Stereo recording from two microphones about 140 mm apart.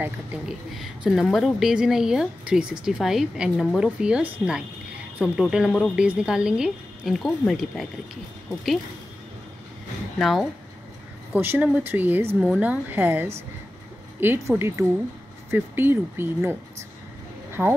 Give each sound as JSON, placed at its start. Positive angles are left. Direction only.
{"t": 0.0, "sound": "a woman's voice", "side_deg": -5}
{"t": 10.1, "sound": "a woman's voice", "side_deg": 0}
{"t": 11.3, "sound": "a woman's voice", "side_deg": -15}
{"t": 17.5, "sound": "a sound", "side_deg": -15}